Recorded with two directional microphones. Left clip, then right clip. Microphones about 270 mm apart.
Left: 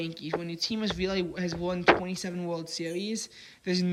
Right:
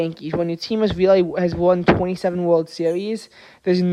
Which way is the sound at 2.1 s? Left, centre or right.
Centre.